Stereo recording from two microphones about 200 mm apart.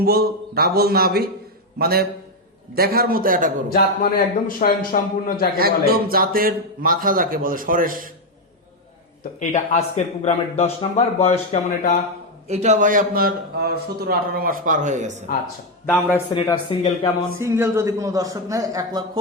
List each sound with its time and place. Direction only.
0.0 s a man's voice: 50° right (ahead or behind)
3.7 s a man's voice: 45° left (ahead or behind)
5.5 s a man's voice: 50° right (ahead or behind)
9.4 s speech: 35° left (ahead or behind)
12.5 s a man's voice: 35° right (ahead or behind)
16.3 s speech: 20° left (ahead or behind)
17.4 s a man's voice: 15° right (ahead or behind)